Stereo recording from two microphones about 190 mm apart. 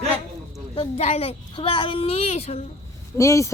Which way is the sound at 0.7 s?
30° left (ahead or behind).